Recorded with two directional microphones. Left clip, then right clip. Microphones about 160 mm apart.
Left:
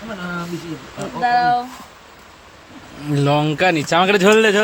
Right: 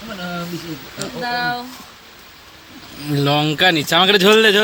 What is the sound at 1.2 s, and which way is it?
Speech, 35° left (ahead or behind).